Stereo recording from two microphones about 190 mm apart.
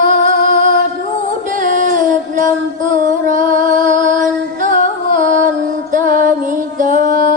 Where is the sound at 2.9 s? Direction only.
40° right (ahead or behind).